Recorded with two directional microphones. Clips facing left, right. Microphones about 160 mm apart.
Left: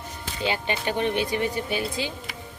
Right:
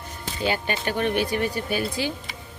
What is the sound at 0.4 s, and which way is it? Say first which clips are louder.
Speech: right 1 dB; 20° left (ahead or behind).